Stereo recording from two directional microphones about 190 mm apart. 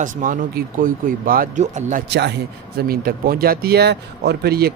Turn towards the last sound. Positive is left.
turn(degrees=-55)  # may be behind; listen again after turning